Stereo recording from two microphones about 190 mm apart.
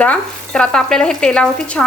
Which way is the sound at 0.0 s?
5° left (ahead or behind).